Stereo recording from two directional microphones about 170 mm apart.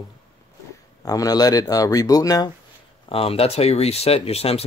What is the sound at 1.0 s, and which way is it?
Speech, 20° left (ahead or behind).